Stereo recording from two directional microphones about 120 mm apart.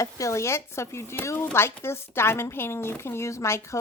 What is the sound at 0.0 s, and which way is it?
Speech, 25° left (ahead or behind).